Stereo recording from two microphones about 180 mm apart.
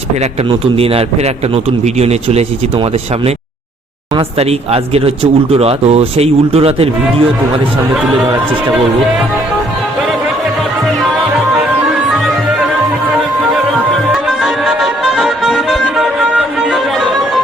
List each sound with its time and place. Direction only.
0.8 s speech: 35° right (ahead or behind)
4.1 s speech: 35° right (ahead or behind)
13.5 s music: centre (ahead or behind)